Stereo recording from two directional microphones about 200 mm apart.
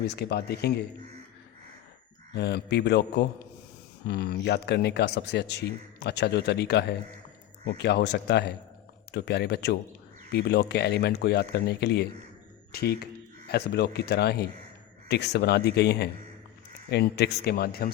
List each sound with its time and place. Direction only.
0.1 s speech: 55° left (ahead or behind)
2.3 s speech: 55° left (ahead or behind)